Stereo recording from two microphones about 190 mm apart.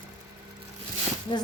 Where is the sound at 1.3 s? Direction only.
25° left (ahead or behind).